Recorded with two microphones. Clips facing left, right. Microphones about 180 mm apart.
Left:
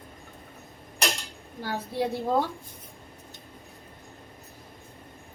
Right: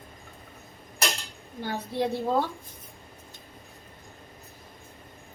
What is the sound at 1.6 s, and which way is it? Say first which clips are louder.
Speech: even; 5° left (ahead or behind).